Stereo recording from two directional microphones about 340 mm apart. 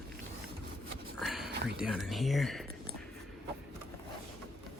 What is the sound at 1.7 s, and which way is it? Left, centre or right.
Speech, centre.